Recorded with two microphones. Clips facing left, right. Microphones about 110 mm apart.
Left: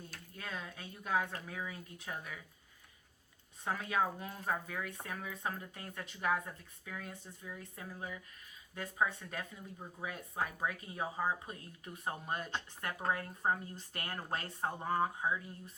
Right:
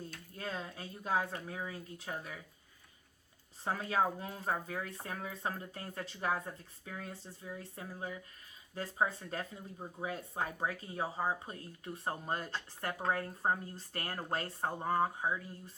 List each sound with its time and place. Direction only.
0.3 s speech: 30° right (ahead or behind)
3.6 s speech: 30° right (ahead or behind)